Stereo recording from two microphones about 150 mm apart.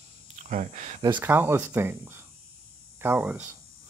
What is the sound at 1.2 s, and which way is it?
Speech, 15° right (ahead or behind).